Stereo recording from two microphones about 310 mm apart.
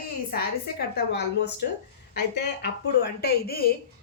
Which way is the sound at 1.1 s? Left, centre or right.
Left.